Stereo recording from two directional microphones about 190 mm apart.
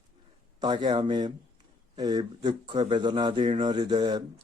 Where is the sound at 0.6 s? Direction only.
20° right (ahead or behind).